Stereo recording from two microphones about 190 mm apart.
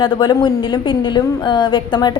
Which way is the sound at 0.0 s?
25° left (ahead or behind).